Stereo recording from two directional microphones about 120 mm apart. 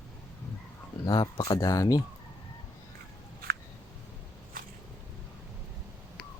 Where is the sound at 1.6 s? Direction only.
30° left (ahead or behind).